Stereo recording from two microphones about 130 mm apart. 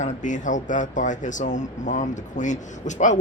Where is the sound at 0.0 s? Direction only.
75° left (ahead or behind).